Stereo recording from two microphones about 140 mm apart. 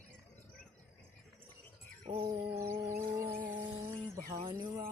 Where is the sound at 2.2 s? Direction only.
20° right (ahead or behind).